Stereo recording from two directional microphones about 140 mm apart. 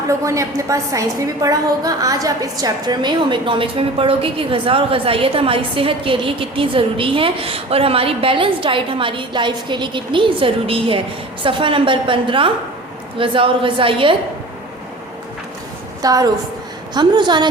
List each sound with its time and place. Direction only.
0.3 s a woman's voice: 20° right (ahead or behind); by 14.2 s 40° right (ahead or behind)
16.0 s a woman's voice: 25° right (ahead or behind)